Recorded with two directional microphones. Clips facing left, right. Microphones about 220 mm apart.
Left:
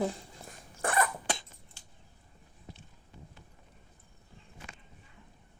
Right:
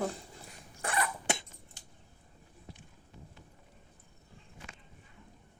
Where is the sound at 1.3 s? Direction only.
25° right (ahead or behind).